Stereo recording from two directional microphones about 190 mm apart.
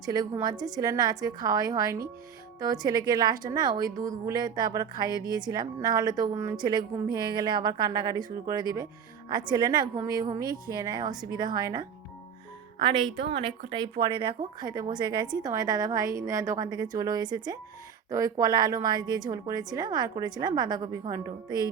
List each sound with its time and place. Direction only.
0.0 s a woman's voice: 20° right (ahead or behind)
13.7 s a woman's voice: 25° right (ahead or behind)